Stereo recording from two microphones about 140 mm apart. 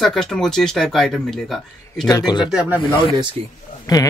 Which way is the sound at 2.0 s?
30° left (ahead or behind).